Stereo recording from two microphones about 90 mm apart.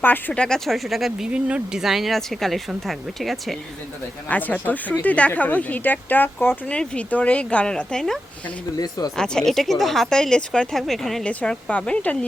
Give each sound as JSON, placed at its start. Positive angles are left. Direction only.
{"t": 0.0, "sound": "speech", "side_deg": 20}
{"t": 0.4, "sound": "speech", "side_deg": 5}
{"t": 4.3, "sound": "speech", "side_deg": 15}
{"t": 8.8, "sound": "speech", "side_deg": 45}
{"t": 9.1, "sound": "speech", "side_deg": 5}
{"t": 11.3, "sound": "speech", "side_deg": 15}